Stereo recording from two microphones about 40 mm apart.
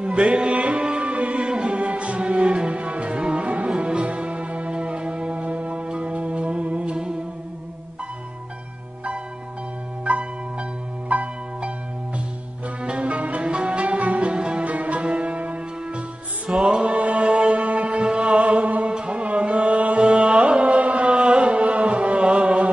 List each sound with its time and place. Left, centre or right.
0.0 s music: right
10.0 s music: right
12.6 s music: right